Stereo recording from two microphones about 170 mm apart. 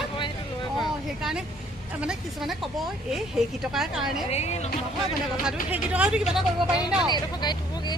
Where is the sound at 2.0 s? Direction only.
5° right (ahead or behind).